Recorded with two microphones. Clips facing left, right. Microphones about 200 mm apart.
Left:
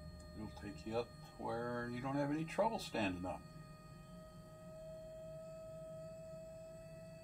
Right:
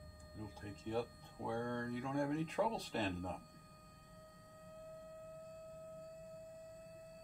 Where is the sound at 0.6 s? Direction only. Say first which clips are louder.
Right 1 dB; 5° left (ahead or behind).